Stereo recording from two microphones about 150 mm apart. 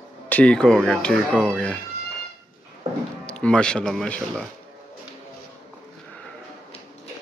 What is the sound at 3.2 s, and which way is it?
Speech, 10° left (ahead or behind).